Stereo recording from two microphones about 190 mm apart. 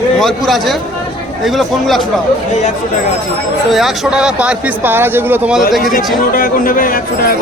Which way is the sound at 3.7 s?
5° right (ahead or behind).